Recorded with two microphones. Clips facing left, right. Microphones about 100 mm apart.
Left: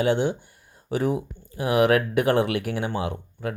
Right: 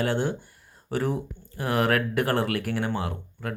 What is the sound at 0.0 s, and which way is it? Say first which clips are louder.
Speech: left 4 dB; 15° left (ahead or behind).